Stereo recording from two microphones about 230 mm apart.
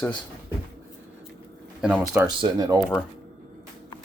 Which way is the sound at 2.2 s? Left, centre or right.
Centre.